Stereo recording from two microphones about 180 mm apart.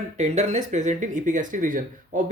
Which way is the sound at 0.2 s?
40° right (ahead or behind).